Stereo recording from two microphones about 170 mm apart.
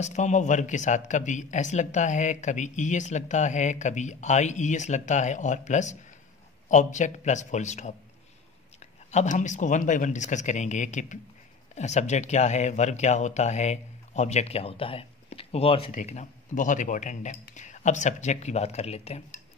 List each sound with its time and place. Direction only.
0.0 s speech: 45° left (ahead or behind)
15.9 s speech: 45° left (ahead or behind)